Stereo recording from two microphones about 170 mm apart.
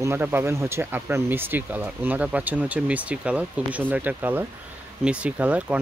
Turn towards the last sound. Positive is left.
turn(degrees=-10)  # may be behind; listen again after turning